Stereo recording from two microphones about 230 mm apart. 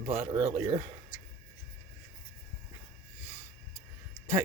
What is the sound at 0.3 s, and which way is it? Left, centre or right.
Speech, centre.